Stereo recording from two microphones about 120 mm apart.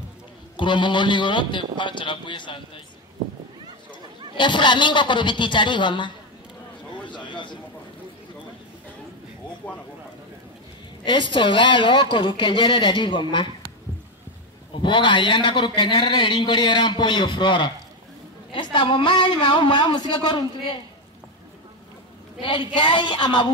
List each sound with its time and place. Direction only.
0.6 s a man's voice: 40° left (ahead or behind)
4.4 s a man's voice: 40° left (ahead or behind)
7.1 s a sound: 40° left (ahead or behind)
11.1 s speech: 40° left (ahead or behind)
14.8 s a man's voice: 45° left (ahead or behind)
22.4 s a man's voice: 45° left (ahead or behind)